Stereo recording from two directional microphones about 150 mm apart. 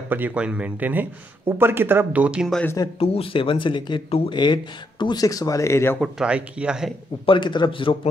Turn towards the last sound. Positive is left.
turn(degrees=35)  # may be behind; listen again after turning